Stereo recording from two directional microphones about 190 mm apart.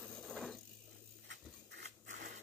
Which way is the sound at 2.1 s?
40° right (ahead or behind).